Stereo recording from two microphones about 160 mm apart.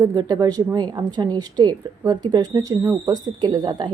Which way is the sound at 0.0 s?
25° right (ahead or behind).